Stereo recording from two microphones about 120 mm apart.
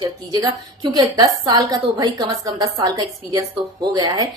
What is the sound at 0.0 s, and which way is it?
A woman's voice, 35° right (ahead or behind).